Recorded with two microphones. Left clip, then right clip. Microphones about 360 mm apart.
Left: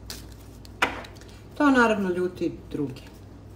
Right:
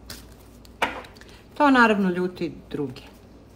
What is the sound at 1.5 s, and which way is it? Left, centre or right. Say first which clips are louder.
Speech: right 3 dB; right.